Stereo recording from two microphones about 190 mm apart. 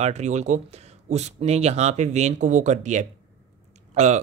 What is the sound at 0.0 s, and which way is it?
Speech, 35° right (ahead or behind).